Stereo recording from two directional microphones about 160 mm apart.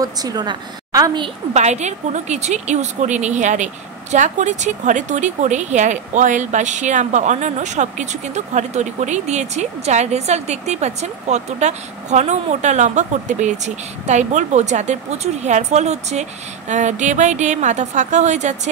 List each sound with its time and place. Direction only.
0.0 s a woman's voice: 25° right (ahead or behind)
1.5 s a woman's voice: 45° right (ahead or behind)